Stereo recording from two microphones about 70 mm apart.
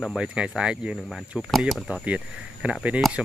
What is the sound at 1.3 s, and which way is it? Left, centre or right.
Speech, centre.